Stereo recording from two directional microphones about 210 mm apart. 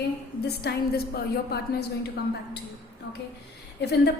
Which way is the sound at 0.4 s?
50° left (ahead or behind).